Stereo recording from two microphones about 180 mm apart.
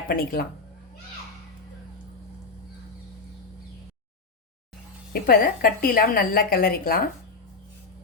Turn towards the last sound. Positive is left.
turn(degrees=55)  # may be behind; listen again after turning